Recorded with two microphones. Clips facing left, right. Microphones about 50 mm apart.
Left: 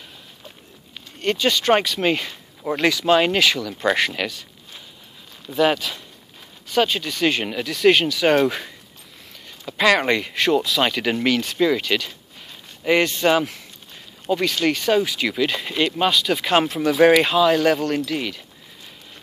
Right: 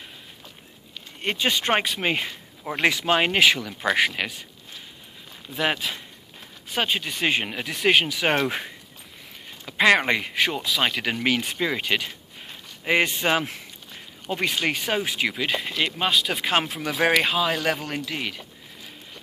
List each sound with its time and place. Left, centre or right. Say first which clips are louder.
1.2 s speech: left 4 dB; centre
3.8 s speech: left 2 dB; centre
5.6 s speech: left 6 dB; centre
12.8 s a sound: left 4 dB; centre
14.3 s speech: left 5 dB; right